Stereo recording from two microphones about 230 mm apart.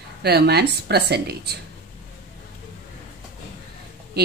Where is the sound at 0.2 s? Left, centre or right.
Right.